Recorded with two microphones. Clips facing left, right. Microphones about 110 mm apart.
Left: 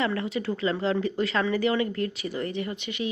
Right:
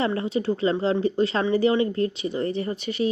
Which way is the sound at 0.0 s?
30° right (ahead or behind).